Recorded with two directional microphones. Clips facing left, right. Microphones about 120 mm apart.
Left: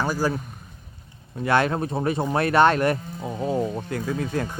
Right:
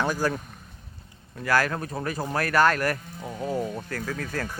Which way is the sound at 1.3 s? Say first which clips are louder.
Left 3 dB; 25° left (ahead or behind).